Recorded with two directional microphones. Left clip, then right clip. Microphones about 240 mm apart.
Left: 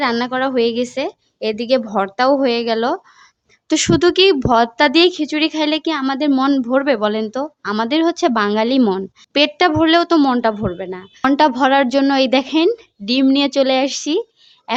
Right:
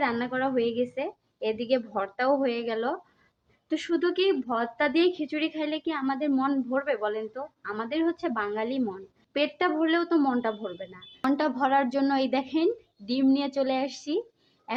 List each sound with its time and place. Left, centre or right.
0.0 s a woman's voice: left